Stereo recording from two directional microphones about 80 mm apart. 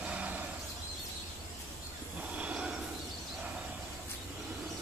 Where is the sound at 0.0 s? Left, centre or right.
Centre.